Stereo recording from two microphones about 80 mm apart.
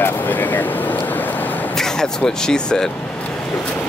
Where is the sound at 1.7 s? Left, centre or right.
Centre.